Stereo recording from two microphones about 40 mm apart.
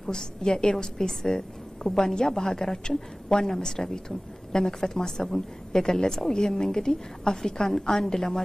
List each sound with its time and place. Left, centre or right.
0.0 s a woman's voice: centre